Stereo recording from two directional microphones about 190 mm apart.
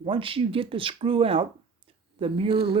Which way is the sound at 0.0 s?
30° right (ahead or behind).